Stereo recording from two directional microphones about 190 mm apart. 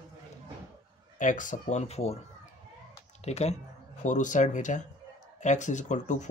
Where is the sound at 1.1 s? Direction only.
45° left (ahead or behind).